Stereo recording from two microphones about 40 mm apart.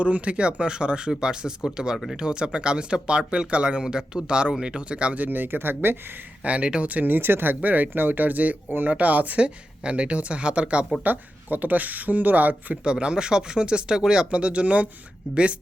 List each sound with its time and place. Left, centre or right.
0.0 s speech: right
5.1 s speech: right
6.4 s speech: right
7.0 s speech: right
7.6 s speech: right
9.4 s speech: right
11.0 s speech: right
12.7 s speech: right
14.3 s speech: right